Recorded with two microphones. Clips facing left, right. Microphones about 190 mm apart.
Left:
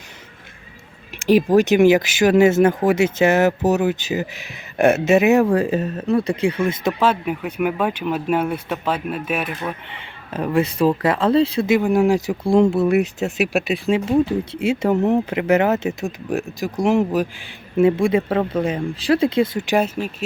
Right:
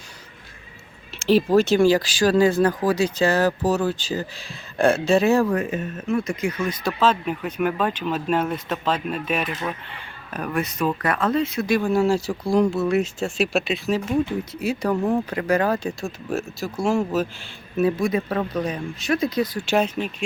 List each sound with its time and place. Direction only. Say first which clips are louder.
1.3 s speech: left 3 dB; 15° left (ahead or behind)
7.0 s speech: even; 10° left (ahead or behind)
9.9 s speech: left 4 dB; 25° left (ahead or behind)
13.8 s speech: left 5 dB; 25° left (ahead or behind)
19.7 s speech: even; 5° left (ahead or behind)